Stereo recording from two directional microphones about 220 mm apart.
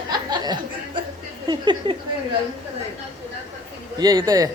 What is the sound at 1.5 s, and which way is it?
Speech, 20° right (ahead or behind).